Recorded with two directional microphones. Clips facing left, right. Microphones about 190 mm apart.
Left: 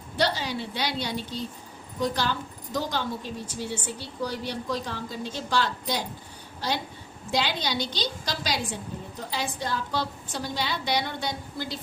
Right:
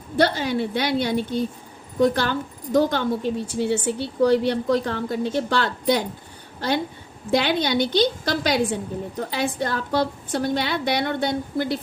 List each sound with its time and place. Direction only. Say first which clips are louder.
0.2 s a woman's voice: right 7 dB; 55° right (ahead or behind)